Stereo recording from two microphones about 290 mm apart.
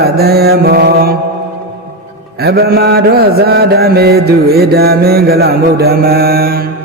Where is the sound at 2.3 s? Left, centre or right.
Right.